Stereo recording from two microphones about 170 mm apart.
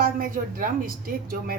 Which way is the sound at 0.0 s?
55° right (ahead or behind).